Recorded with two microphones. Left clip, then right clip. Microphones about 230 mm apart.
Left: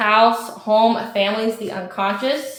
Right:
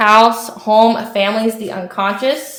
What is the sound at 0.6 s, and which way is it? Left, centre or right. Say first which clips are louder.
Speech: right 5 dB; right.